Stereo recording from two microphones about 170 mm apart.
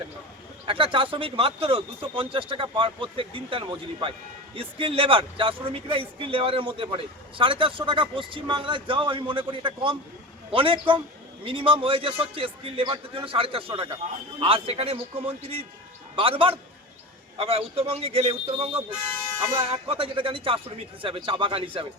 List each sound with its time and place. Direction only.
0.6 s speech: 30° right (ahead or behind)